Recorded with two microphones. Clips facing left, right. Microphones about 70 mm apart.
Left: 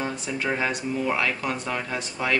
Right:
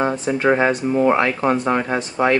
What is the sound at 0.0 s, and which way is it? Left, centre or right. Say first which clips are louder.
Speech: right 10 dB; right.